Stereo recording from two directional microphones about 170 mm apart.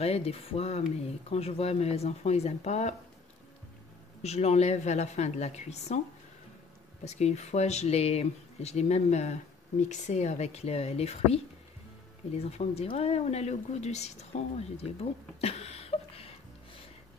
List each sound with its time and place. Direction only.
0.0 s speech: 35° left (ahead or behind)
4.2 s speech: 40° left (ahead or behind)
7.1 s speech: 40° left (ahead or behind)
12.4 s speech: 40° left (ahead or behind)